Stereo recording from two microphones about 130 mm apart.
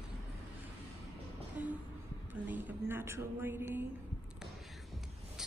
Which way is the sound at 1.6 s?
10° right (ahead or behind).